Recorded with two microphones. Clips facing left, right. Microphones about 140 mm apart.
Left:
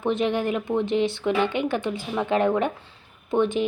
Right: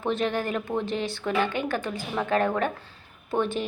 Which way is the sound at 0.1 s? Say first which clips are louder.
Left 3 dB; 20° left (ahead or behind).